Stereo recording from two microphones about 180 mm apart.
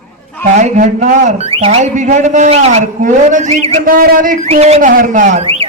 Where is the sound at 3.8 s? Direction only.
55° right (ahead or behind).